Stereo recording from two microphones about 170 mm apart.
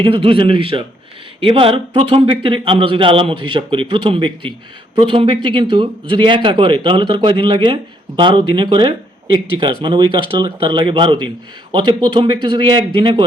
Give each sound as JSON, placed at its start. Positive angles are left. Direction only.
{"t": 0.0, "sound": "speech", "side_deg": -30}